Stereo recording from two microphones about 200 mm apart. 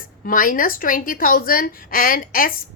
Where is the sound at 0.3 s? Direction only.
45° left (ahead or behind).